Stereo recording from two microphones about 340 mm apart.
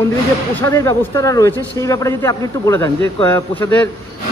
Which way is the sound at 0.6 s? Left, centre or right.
Centre.